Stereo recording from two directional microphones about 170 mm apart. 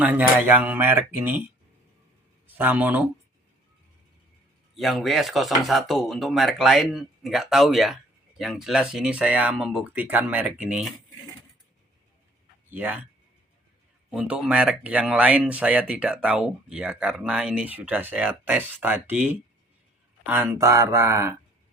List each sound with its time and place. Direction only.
0.0 s speech: 10° right (ahead or behind)
2.5 s speech: 10° right (ahead or behind)
4.7 s speech: centre (ahead or behind)
12.7 s speech: 10° right (ahead or behind)
14.1 s speech: 5° right (ahead or behind)